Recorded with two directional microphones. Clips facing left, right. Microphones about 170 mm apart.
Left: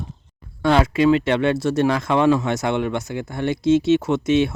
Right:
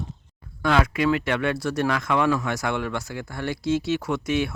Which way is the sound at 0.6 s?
30° left (ahead or behind).